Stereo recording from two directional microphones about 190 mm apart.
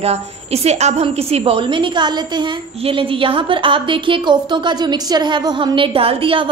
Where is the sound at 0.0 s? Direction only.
35° right (ahead or behind).